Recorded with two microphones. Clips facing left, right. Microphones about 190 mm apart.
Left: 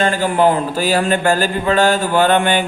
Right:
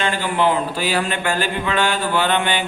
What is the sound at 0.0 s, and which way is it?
Speech, 45° left (ahead or behind).